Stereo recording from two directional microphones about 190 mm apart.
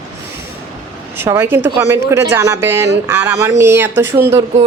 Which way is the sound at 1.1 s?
15° right (ahead or behind).